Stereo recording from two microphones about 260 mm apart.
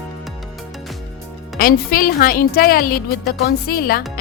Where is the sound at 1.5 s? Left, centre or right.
Left.